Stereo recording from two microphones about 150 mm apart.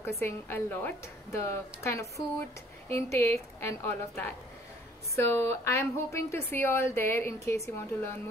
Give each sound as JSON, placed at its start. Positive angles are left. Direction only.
{"t": 0.2, "sound": "a woman's voice", "side_deg": 15}